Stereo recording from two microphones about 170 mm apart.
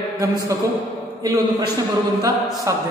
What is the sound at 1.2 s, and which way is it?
Speech, 20° right (ahead or behind).